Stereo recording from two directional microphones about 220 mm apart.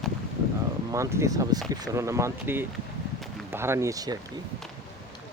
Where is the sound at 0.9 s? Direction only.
15° right (ahead or behind).